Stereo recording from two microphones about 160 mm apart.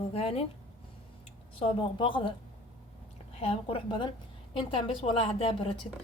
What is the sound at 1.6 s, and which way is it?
Speech, 30° left (ahead or behind).